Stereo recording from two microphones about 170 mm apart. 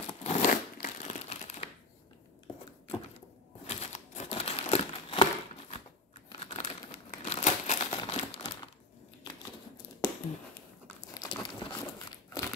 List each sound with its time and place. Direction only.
0.2 s crumpling: 45° left (ahead or behind)
1.2 s crumpling: 40° left (ahead or behind)
3.6 s crumpling: 40° left (ahead or behind)
8.0 s crumpling: 25° left (ahead or behind)
11.1 s crumpling: 25° left (ahead or behind)